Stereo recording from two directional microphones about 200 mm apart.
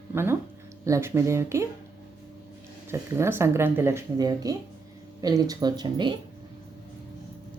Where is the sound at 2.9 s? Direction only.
10° right (ahead or behind).